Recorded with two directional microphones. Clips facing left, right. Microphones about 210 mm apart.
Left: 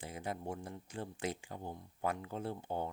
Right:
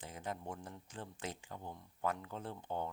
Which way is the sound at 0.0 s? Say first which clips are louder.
Left 2 dB; 10° left (ahead or behind).